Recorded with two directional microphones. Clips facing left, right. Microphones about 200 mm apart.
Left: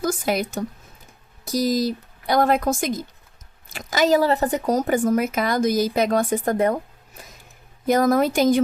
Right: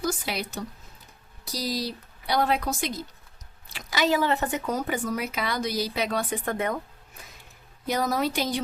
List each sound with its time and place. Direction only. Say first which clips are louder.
0.0 s speech: left 7 dB; 50° left (ahead or behind)
7.9 s speech: left 8 dB; 50° left (ahead or behind)